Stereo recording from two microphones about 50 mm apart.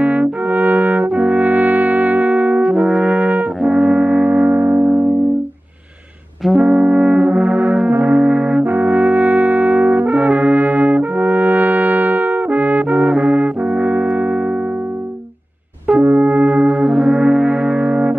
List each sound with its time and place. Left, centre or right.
0.0 s brass instrument: right
2.6 s brass instrument: centre; by 5.0 s right
6.5 s brass instrument: right
8.6 s brass instrument: right
13.0 s music: centre
13.6 s brass instrument: right
16.0 s brass instrument: right